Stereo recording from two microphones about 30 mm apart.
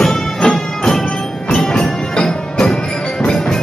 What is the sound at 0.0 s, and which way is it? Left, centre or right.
Music, centre.